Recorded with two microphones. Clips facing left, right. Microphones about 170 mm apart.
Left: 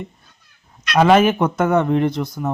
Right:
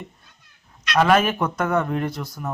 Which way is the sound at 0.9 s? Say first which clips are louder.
Left 4 dB; 20° left (ahead or behind).